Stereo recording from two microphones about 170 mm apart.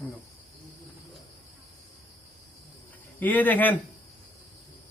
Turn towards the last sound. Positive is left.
turn(degrees=10)  # may be behind; listen again after turning